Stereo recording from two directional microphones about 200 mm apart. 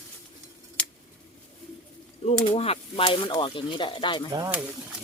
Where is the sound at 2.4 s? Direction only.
30° left (ahead or behind).